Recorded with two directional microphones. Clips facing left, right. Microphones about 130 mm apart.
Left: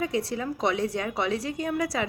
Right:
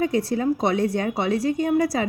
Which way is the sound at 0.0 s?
35° right (ahead or behind).